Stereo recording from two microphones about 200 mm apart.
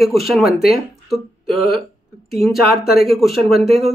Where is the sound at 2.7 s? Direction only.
50° left (ahead or behind).